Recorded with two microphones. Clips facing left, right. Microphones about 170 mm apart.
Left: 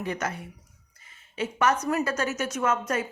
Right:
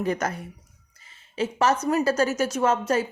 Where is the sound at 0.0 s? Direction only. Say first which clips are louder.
Right 5 dB; 40° right (ahead or behind).